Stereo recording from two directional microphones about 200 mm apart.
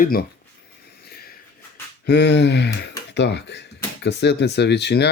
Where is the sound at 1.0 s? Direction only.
50° left (ahead or behind).